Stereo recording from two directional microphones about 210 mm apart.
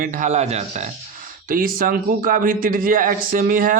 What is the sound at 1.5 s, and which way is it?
A man's voice, 40° right (ahead or behind).